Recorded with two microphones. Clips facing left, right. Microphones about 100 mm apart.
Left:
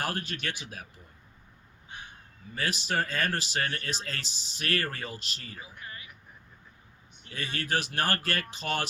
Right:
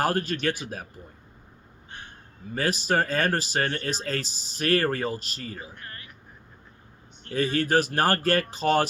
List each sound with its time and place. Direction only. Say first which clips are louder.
0.0 s speech: right 9 dB; 40° right (ahead or behind)
1.9 s a sound: right 1 dB; 5° left (ahead or behind)
2.6 s speech: right 6 dB; 40° right (ahead or behind)
7.3 s speech: right 9 dB; 35° right (ahead or behind)